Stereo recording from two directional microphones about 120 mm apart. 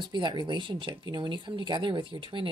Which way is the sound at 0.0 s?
40° right (ahead or behind).